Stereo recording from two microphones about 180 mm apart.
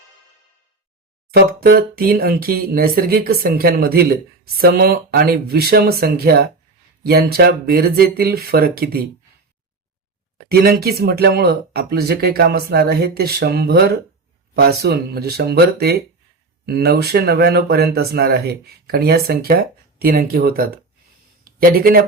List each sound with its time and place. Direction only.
1.3 s speech: 55° right (ahead or behind)
10.3 s speech: 60° right (ahead or behind)